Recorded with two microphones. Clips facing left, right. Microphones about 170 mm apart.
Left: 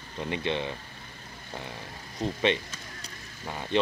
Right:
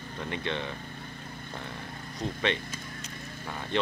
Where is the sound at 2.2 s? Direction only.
20° left (ahead or behind).